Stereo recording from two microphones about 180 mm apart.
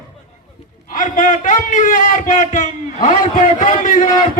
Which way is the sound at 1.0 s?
45° left (ahead or behind).